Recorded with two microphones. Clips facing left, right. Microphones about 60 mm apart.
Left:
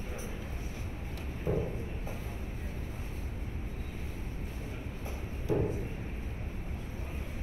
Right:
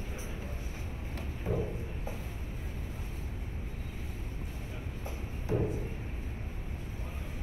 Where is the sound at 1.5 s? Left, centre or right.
Left.